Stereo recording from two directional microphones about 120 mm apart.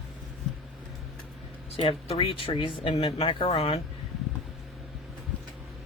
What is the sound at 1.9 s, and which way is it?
Speech, 55° left (ahead or behind).